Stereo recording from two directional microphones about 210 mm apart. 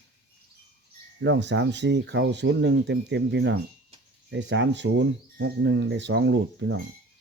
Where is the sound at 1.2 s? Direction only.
60° right (ahead or behind).